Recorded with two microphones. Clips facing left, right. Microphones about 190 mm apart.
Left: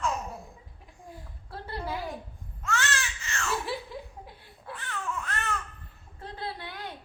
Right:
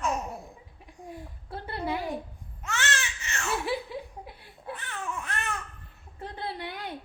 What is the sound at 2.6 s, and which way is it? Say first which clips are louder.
Baby cry: left 1 dB; 20° right (ahead or behind).